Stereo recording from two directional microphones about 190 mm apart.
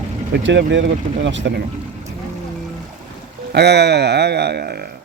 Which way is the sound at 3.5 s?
60° right (ahead or behind).